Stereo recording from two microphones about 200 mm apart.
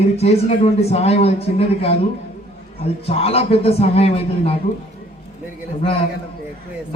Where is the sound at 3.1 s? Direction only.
30° left (ahead or behind).